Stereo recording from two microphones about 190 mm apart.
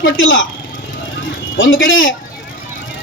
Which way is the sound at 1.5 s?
90° left.